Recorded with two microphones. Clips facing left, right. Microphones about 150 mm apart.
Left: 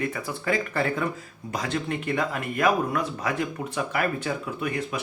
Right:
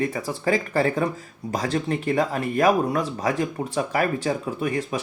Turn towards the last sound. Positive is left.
turn(degrees=-35)  # may be behind; listen again after turning